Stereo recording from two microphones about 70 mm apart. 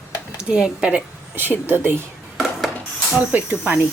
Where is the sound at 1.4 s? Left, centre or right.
Right.